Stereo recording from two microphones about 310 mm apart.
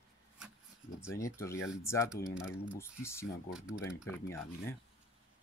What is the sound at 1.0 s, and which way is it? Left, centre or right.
Speech, centre.